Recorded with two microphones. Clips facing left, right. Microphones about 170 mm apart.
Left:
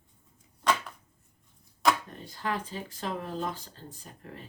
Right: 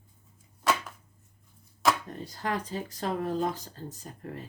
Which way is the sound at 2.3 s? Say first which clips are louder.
Right 1 dB; 40° right (ahead or behind).